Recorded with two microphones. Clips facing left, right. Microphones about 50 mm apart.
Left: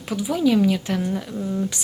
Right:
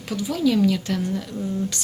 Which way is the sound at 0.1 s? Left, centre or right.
Centre.